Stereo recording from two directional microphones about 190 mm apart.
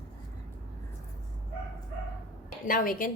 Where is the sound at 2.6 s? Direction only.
45° left (ahead or behind).